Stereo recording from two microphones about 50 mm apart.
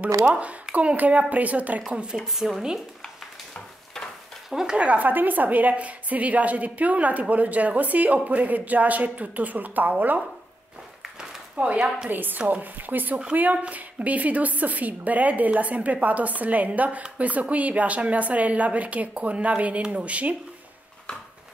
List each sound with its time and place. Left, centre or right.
0.2 s a woman's voice: right
1.9 s speech: centre
4.5 s speech: centre
4.7 s a woman's voice: right
11.5 s a woman's voice: right
12.1 s a woman's voice: right
21.1 s a sound: left